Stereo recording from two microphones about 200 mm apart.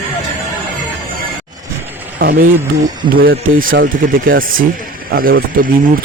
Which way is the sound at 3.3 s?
80° right.